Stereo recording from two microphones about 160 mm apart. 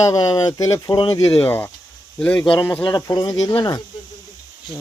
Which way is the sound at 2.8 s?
25° left (ahead or behind).